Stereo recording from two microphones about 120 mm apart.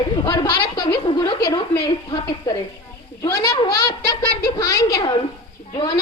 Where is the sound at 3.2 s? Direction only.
30° left (ahead or behind).